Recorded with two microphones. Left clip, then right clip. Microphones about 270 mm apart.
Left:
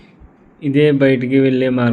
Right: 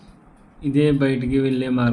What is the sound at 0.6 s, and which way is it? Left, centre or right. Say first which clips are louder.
A man's voice: left 6 dB; centre.